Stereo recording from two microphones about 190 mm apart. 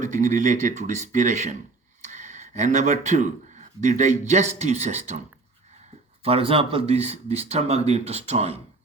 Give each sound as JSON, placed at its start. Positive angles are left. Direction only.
{"t": 0.0, "sound": "speech", "side_deg": -40}
{"t": 2.0, "sound": "a sound", "side_deg": -40}
{"t": 4.3, "sound": "speech", "side_deg": -40}
{"t": 6.2, "sound": "speech", "side_deg": -30}